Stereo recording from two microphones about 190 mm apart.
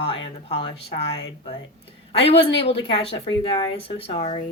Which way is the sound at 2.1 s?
30° left (ahead or behind).